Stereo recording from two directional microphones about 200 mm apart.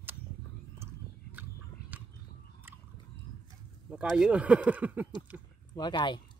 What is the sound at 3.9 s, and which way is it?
Speech, 5° right (ahead or behind).